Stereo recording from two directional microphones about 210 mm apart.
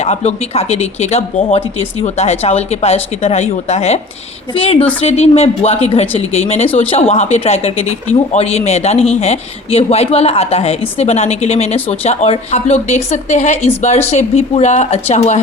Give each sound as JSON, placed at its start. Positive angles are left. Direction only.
{"t": 0.0, "sound": "speech", "side_deg": 30}